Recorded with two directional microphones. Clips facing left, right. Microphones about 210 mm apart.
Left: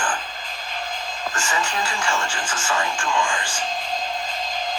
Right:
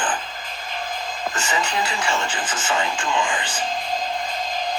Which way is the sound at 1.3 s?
20° right (ahead or behind).